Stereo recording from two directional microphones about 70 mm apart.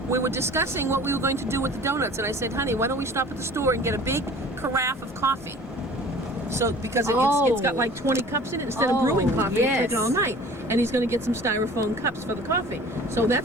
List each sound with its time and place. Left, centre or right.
0.1 s speech: right
6.5 s speech: right